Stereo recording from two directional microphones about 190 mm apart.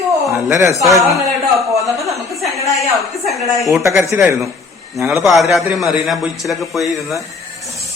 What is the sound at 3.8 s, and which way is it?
Speech, 15° right (ahead or behind).